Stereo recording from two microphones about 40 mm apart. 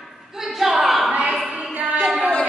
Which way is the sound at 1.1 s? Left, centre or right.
Right.